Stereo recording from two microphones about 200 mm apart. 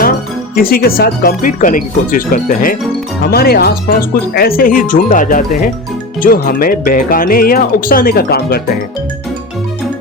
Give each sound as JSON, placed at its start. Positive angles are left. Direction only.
{"t": 0.5, "sound": "speech", "side_deg": 50}